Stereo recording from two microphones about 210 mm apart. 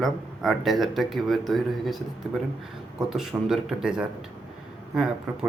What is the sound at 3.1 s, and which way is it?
Speech, centre (ahead or behind).